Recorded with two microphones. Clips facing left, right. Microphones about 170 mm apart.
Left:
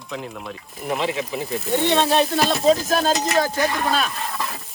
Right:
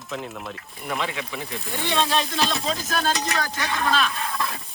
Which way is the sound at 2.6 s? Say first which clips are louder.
Left 9 dB; 45° left (ahead or behind).